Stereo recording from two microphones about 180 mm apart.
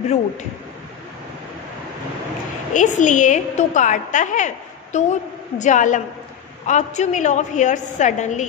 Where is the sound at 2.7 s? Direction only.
45° left (ahead or behind).